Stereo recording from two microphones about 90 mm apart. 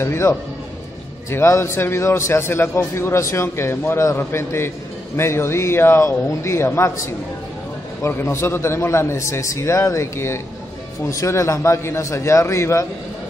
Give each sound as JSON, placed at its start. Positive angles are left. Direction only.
{"t": 0.0, "sound": "a man's voice", "side_deg": 30}
{"t": 8.1, "sound": "a man's voice", "side_deg": 30}